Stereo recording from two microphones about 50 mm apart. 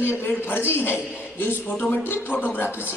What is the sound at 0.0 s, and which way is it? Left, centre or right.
A man's voice, left.